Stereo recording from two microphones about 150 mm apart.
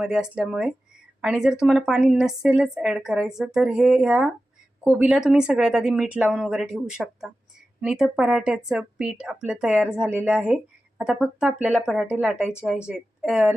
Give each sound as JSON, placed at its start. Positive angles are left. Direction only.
{"t": 0.0, "sound": "a woman's voice", "side_deg": -5}